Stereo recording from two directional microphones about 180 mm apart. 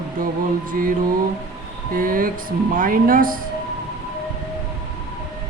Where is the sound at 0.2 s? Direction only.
50° right (ahead or behind).